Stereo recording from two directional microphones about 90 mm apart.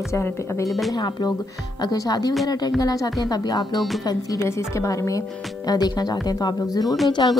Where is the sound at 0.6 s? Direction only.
Centre (ahead or behind).